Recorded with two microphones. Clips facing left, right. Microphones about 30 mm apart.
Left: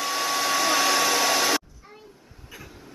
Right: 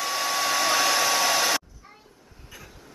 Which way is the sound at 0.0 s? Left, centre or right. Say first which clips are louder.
Left 1 dB; centre.